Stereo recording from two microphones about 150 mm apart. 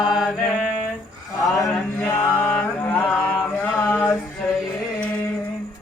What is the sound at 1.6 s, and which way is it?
Mantra, 10° left (ahead or behind).